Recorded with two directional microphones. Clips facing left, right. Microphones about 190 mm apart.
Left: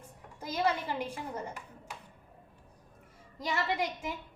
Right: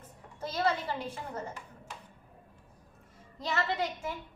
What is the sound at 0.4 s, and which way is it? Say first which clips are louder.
A child's voice: even; 15° left (ahead or behind).